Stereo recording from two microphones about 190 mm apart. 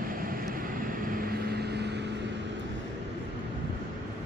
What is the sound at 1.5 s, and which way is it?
Vehicle, 60° right (ahead or behind).